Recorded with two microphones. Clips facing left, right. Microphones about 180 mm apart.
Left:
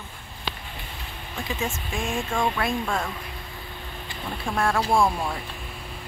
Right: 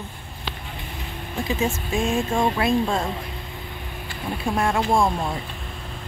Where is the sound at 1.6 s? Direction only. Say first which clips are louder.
Right 6 dB; 20° right (ahead or behind).